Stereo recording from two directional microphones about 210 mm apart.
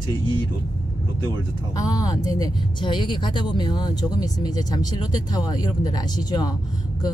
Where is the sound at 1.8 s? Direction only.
15° left (ahead or behind).